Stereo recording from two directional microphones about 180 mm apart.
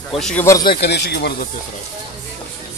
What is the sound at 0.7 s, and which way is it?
Speech, 65° left (ahead or behind).